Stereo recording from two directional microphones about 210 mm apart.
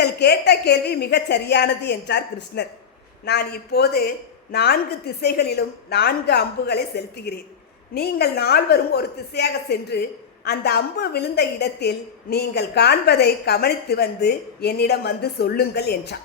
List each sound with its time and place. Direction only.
0.0 s a woman's voice: 50° left (ahead or behind)